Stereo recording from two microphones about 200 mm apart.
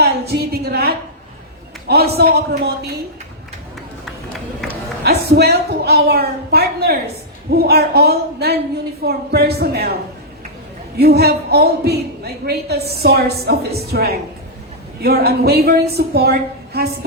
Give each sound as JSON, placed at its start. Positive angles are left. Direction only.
{"t": 0.0, "sound": "a sound", "side_deg": -55}
{"t": 1.9, "sound": "a woman's voice", "side_deg": -50}
{"t": 5.0, "sound": "a woman's voice", "side_deg": -55}